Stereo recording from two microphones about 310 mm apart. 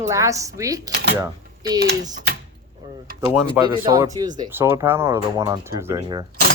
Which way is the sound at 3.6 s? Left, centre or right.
Centre.